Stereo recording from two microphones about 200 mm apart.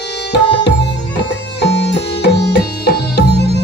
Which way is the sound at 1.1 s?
60° left (ahead or behind).